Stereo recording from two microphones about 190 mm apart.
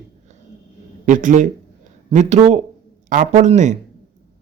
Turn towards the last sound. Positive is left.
turn(degrees=-40)  # may be behind; listen again after turning